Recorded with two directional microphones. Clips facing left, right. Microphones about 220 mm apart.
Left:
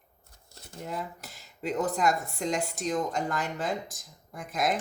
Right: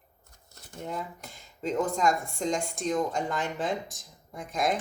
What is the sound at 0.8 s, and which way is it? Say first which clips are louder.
Speech: even; 5° left (ahead or behind).